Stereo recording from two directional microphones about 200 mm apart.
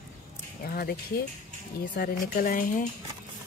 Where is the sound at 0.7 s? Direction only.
50° left (ahead or behind).